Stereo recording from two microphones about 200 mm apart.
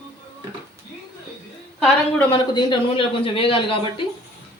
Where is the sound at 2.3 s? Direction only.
20° left (ahead or behind).